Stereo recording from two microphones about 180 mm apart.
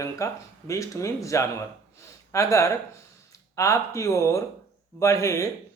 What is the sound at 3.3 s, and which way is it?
Speech, 20° left (ahead or behind).